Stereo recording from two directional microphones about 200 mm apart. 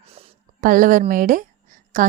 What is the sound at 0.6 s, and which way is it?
A woman's voice, 40° right (ahead or behind).